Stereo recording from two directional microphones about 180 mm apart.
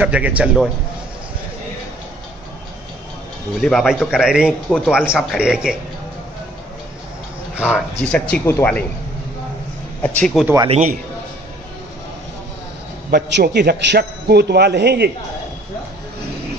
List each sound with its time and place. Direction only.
0.0 s a man's voice: 5° right (ahead or behind)
3.6 s a man's voice: centre (ahead or behind)
7.5 s speech: 5° right (ahead or behind)
8.0 s speech: 5° left (ahead or behind)
10.0 s a man's voice: 5° left (ahead or behind)
13.1 s a man's voice: 65° right (ahead or behind)